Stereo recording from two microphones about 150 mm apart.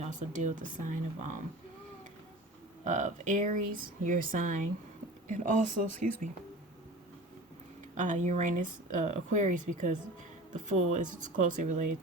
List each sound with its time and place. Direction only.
0.0 s speech: 60° right (ahead or behind)
2.8 s speech: 55° right (ahead or behind)
7.9 s speech: 55° right (ahead or behind)